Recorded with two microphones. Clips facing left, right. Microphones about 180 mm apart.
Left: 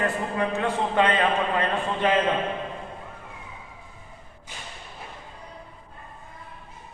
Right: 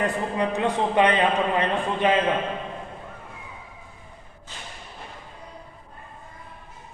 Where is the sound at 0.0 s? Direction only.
15° right (ahead or behind).